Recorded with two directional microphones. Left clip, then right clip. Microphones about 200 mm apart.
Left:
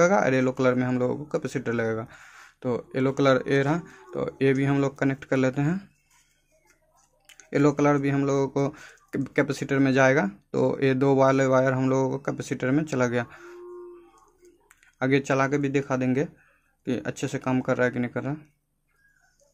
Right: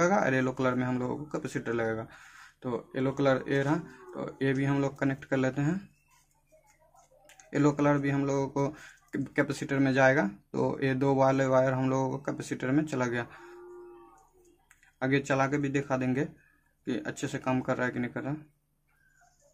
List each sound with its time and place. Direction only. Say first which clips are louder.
0.0 s speech: left 5 dB; 30° left (ahead or behind)
7.2 s speech: left 5 dB; 30° left (ahead or behind)
14.7 s speech: left 5 dB; 35° left (ahead or behind)